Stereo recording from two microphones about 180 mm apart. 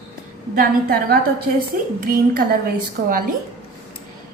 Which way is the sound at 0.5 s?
50° right (ahead or behind).